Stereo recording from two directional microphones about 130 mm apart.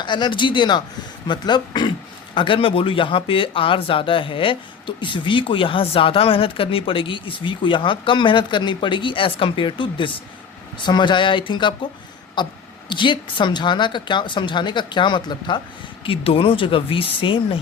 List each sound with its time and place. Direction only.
0.0 s speech: 35° left (ahead or behind)